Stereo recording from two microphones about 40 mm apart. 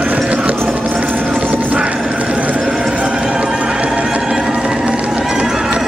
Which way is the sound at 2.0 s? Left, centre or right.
Right.